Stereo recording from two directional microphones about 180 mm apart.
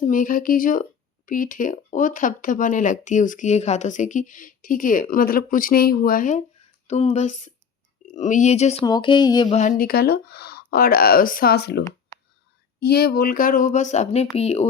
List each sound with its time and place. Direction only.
0.0 s speech: 45° left (ahead or behind)
6.8 s speech: 35° left (ahead or behind)
8.8 s speech: 25° left (ahead or behind)
9.6 s speech: 50° left (ahead or behind); by 11.8 s 65° left (ahead or behind)
12.8 s speech: 60° left (ahead or behind); by 14.7 s 35° left (ahead or behind)